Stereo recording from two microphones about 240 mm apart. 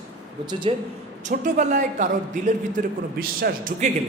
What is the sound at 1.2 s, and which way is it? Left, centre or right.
A man's voice, right.